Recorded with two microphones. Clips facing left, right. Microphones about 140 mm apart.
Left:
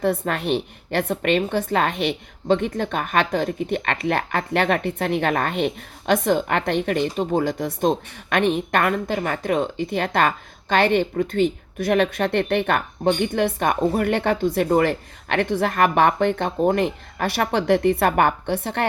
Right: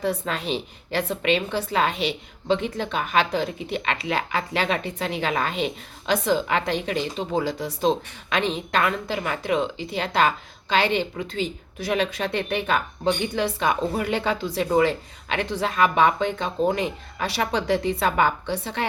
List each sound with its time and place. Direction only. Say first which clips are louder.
0.0 s a woman's voice: left 4 dB; 55° left (ahead or behind)